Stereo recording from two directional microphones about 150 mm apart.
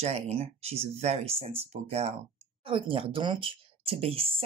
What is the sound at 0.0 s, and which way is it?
Speech, 45° right (ahead or behind).